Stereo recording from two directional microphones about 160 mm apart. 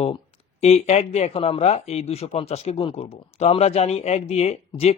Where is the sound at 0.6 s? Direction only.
40° left (ahead or behind).